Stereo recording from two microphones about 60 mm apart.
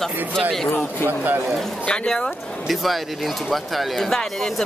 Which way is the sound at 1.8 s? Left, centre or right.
Centre.